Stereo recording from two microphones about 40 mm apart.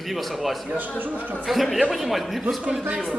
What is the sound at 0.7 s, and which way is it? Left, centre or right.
Speech, right.